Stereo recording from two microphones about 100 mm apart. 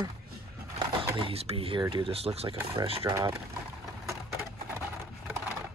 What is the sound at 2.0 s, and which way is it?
Speech, 80° right.